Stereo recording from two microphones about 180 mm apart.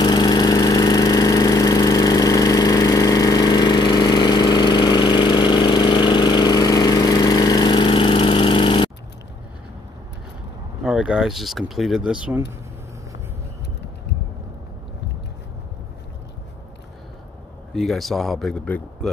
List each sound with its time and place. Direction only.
0.0 s engine: 20° left (ahead or behind)
10.8 s speech: 5° right (ahead or behind)
17.7 s speech: centre (ahead or behind)